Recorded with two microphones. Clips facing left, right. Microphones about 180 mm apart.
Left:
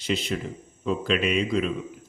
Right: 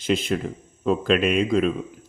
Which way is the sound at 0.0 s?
50° right (ahead or behind).